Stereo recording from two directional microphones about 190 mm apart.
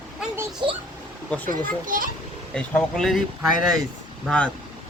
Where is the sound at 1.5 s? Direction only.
45° right (ahead or behind).